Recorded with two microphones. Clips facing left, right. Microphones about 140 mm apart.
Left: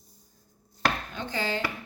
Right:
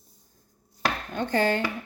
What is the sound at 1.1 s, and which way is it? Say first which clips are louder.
Chopping: right 7 dB; 55° right (ahead or behind).